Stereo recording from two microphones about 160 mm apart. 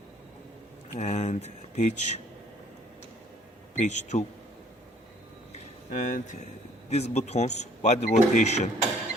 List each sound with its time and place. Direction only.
0.9 s speech: 45° left (ahead or behind)
3.8 s speech: 45° left (ahead or behind)
5.5 s a sound: 60° left (ahead or behind)
6.9 s speech: 45° left (ahead or behind)